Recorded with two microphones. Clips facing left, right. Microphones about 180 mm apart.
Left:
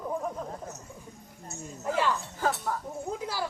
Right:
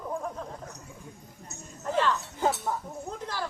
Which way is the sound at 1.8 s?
10° left (ahead or behind).